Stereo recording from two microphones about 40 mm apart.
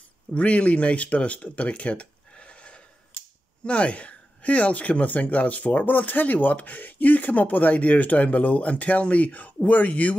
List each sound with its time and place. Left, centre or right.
0.3 s speech: left